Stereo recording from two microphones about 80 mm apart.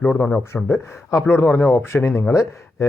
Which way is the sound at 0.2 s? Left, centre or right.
Left.